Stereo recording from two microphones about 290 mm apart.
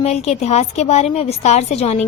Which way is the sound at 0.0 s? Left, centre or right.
Left.